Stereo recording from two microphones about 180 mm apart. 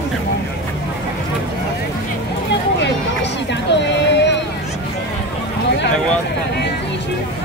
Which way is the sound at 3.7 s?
75° left (ahead or behind).